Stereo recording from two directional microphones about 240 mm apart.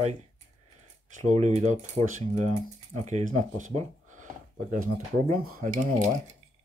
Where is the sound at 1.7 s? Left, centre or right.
Right.